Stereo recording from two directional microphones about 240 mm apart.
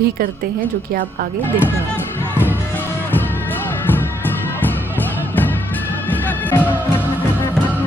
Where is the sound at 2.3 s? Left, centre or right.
Centre.